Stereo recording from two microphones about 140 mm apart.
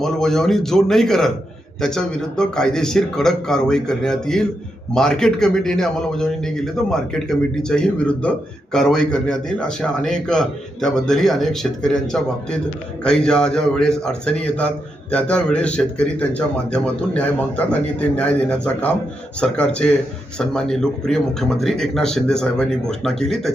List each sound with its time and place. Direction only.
0.0 s a man's voice: 5° left (ahead or behind)